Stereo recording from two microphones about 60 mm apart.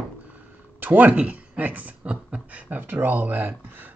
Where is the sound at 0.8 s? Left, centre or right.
Right.